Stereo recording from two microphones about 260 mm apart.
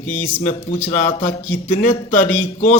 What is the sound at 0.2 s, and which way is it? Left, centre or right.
A man's voice, left.